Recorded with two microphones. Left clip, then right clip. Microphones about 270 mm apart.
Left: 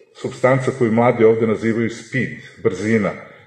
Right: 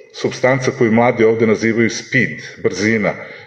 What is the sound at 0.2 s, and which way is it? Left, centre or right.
A man's voice, right.